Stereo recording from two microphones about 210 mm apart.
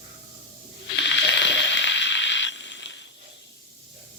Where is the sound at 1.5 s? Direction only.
60° left (ahead or behind).